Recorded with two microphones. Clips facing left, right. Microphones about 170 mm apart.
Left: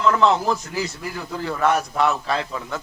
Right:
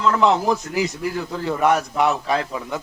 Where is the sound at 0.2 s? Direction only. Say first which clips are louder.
Right 1 dB; 15° right (ahead or behind).